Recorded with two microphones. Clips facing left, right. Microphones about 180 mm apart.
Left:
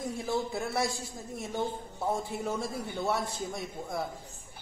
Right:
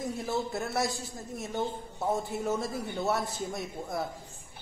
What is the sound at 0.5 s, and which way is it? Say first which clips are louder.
Speech: even; centre (ahead or behind).